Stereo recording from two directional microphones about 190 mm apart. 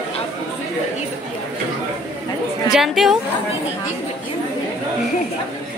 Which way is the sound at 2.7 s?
Centre (ahead or behind).